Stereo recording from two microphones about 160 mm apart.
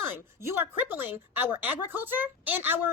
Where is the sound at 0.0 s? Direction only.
15° right (ahead or behind).